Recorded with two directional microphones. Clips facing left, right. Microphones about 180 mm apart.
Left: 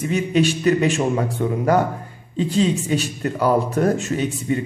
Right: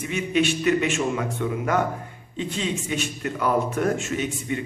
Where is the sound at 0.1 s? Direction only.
35° left (ahead or behind).